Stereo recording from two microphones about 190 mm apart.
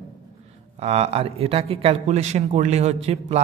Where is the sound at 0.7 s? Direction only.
35° right (ahead or behind).